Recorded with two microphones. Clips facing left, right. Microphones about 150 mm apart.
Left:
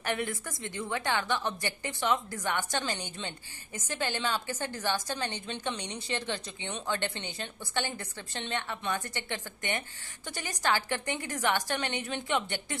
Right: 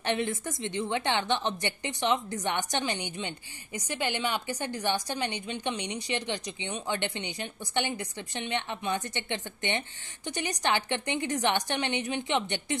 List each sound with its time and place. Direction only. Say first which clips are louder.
0.0 s a woman's voice: right 3 dB; 25° right (ahead or behind)